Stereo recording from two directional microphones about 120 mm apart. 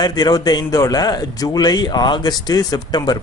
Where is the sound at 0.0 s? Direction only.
35° left (ahead or behind).